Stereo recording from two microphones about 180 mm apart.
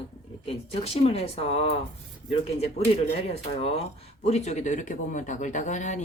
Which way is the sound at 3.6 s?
35° left (ahead or behind).